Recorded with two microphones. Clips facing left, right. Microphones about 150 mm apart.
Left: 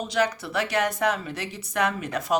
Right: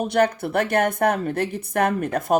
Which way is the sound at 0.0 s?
55° right (ahead or behind).